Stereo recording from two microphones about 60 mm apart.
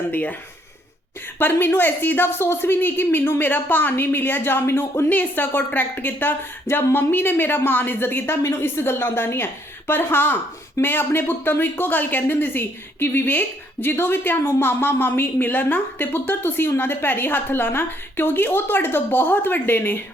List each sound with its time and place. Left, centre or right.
0.1 s speech: left
1.4 s speech: left
5.0 s speech: left